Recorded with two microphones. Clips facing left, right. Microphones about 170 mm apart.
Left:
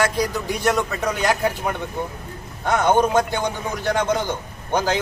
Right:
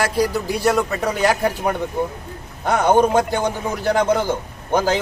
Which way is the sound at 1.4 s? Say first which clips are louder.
Right 3 dB; 40° right (ahead or behind).